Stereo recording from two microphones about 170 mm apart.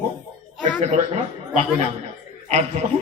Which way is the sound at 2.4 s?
40° right (ahead or behind).